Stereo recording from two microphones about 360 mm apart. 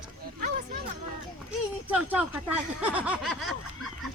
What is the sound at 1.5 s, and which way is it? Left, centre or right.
Speech, centre.